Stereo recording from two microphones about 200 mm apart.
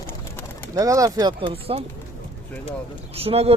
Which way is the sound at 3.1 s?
30° right (ahead or behind).